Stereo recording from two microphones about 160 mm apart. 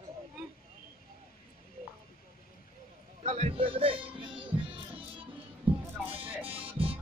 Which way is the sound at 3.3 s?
40° right (ahead or behind).